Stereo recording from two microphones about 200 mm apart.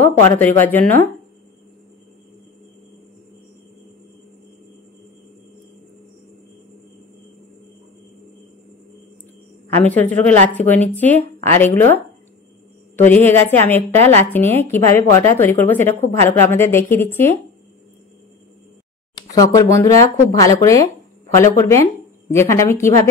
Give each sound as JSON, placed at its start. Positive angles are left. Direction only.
{"t": 0.0, "sound": "a woman's voice", "side_deg": 10}
{"t": 9.7, "sound": "a woman's voice", "side_deg": 10}
{"t": 13.0, "sound": "a woman's voice", "side_deg": 10}
{"t": 19.3, "sound": "a woman's voice", "side_deg": 15}